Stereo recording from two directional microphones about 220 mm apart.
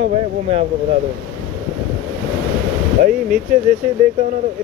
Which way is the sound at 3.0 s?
40° right (ahead or behind).